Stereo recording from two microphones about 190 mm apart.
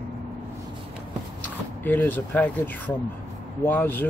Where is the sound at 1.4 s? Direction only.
10° left (ahead or behind).